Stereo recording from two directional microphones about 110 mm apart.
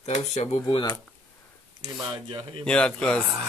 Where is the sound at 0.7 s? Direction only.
45° left (ahead or behind).